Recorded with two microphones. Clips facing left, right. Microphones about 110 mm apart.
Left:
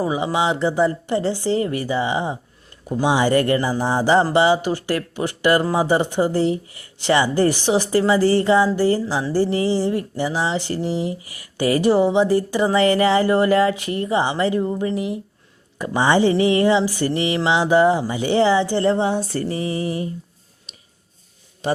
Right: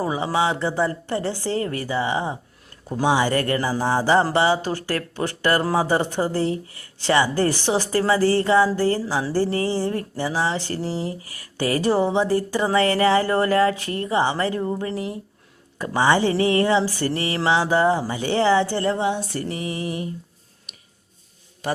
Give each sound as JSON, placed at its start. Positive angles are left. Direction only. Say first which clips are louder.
{"t": 0.0, "sound": "speech", "louder": "left 2 dB", "side_deg": 15}
{"t": 20.7, "sound": "a sound", "louder": "left 1 dB", "side_deg": 25}
{"t": 21.6, "sound": "a man's voice", "louder": "left 4 dB", "side_deg": 20}